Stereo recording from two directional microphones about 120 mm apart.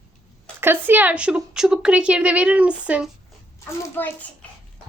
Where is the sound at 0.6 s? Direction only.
15° right (ahead or behind).